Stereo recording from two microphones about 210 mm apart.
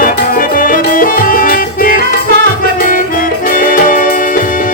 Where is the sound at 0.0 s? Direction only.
40° left (ahead or behind).